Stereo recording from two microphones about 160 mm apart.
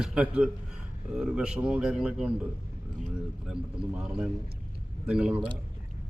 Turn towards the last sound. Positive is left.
turn(degrees=-5)  # may be behind; listen again after turning